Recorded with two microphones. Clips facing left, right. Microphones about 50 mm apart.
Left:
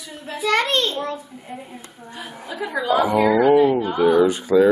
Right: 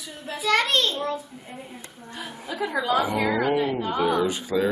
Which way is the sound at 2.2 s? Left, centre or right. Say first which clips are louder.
Even; centre.